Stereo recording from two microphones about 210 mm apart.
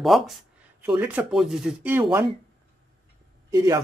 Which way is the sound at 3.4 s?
15° right (ahead or behind).